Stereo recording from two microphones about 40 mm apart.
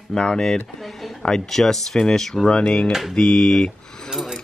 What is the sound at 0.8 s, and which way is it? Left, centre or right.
Speech, centre.